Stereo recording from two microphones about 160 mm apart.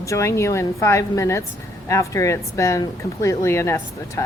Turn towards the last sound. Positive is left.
turn(degrees=15)  # may be behind; listen again after turning